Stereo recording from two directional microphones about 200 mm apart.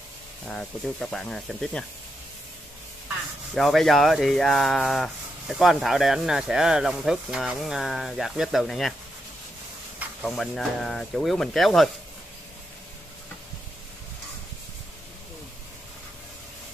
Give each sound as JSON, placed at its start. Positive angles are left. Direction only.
{"t": 0.5, "sound": "speech", "side_deg": 5}
{"t": 3.5, "sound": "speech", "side_deg": 0}
{"t": 9.9, "sound": "speech", "side_deg": 0}